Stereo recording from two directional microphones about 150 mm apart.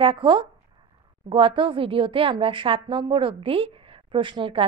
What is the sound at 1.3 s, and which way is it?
A woman's voice, 35° right (ahead or behind).